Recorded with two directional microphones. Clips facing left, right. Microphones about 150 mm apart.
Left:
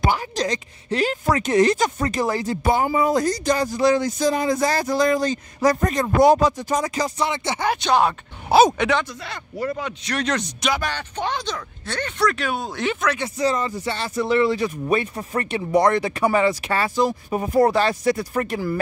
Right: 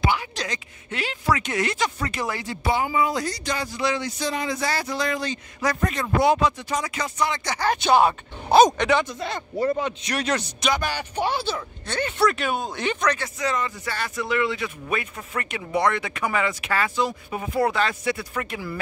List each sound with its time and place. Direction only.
0.0 s speech: 40° left (ahead or behind)
7.2 s speech: 25° left (ahead or behind)
7.7 s speech: 5° right (ahead or behind)
9.2 s a man's voice: 25° right (ahead or behind)
10.1 s speech: 5° right (ahead or behind)
13.4 s speech: 35° left (ahead or behind)